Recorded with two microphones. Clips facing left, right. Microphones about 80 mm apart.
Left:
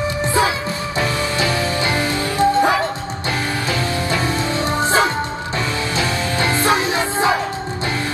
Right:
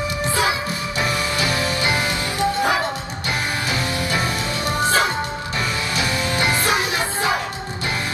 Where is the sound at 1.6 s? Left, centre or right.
Centre.